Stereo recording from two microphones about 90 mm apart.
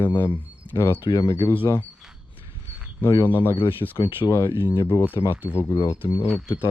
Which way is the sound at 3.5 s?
65° left (ahead or behind).